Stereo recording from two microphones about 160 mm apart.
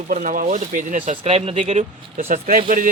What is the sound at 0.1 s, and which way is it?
Speech, 60° right (ahead or behind).